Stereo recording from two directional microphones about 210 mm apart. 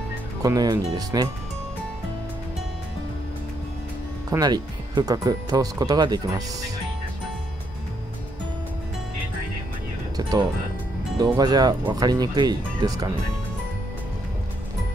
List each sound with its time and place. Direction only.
0.4 s speech: 15° right (ahead or behind)
4.3 s speech: 20° right (ahead or behind)
10.1 s music: 20° right (ahead or behind)
11.1 s speech: 20° right (ahead or behind)